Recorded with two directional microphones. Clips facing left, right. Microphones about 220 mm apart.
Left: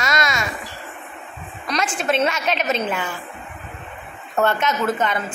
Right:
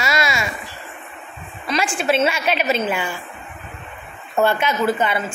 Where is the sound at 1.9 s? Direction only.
5° right (ahead or behind).